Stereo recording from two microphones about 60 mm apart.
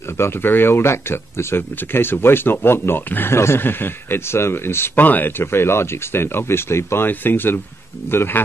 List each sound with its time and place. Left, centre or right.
0.2 s speech: left